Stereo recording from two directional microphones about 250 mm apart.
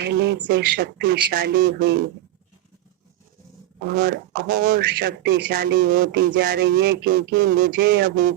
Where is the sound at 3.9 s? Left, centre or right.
Right.